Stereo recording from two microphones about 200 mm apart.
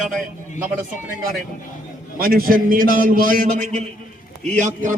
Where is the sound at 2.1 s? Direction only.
45° right (ahead or behind).